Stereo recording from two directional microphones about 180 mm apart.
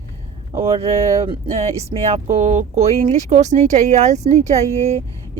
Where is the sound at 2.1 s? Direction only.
40° right (ahead or behind).